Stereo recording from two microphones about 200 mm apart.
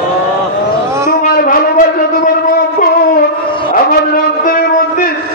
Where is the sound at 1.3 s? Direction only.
45° left (ahead or behind).